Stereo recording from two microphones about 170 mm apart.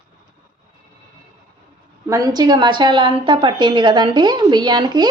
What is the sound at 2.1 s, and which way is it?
A woman's voice, 20° right (ahead or behind).